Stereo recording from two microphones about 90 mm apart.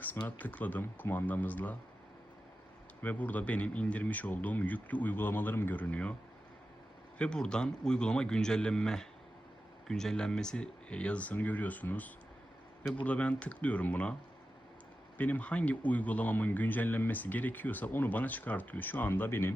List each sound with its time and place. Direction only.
0.3 s speech: 20° left (ahead or behind)
3.0 s speech: 20° left (ahead or behind)
7.2 s speech: 10° left (ahead or behind)
15.2 s speech: 15° left (ahead or behind)